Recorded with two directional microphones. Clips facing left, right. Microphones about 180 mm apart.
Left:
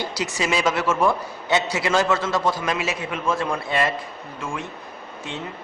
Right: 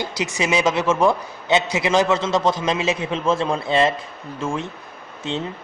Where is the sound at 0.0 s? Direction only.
15° right (ahead or behind).